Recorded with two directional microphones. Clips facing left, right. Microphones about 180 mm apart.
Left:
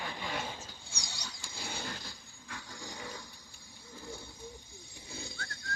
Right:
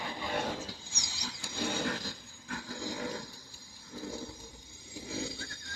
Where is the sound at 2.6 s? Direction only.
90° right.